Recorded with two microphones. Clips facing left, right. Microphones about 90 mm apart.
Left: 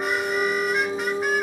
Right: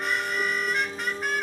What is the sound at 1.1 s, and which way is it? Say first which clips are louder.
Music: left 6 dB; 5° left (ahead or behind).